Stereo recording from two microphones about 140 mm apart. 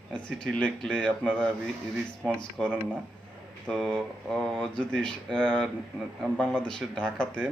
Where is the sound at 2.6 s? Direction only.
5° left (ahead or behind).